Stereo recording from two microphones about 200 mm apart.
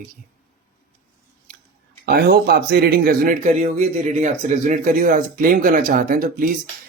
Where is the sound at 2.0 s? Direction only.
50° right (ahead or behind).